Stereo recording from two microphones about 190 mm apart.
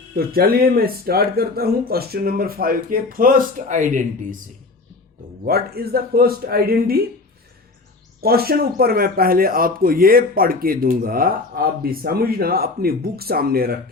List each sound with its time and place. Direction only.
0.2 s a man's voice: 50° right (ahead or behind)
5.5 s a man's voice: 55° right (ahead or behind)
8.2 s a man's voice: 55° right (ahead or behind)